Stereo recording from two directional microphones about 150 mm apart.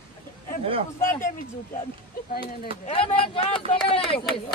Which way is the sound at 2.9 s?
35° left (ahead or behind).